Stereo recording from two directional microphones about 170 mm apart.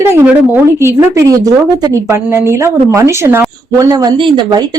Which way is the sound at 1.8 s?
15° right (ahead or behind).